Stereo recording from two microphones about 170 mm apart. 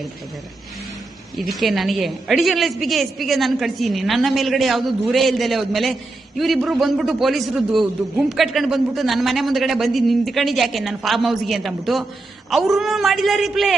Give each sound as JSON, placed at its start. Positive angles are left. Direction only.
{"t": 1.4, "sound": "a woman's voice", "side_deg": 0}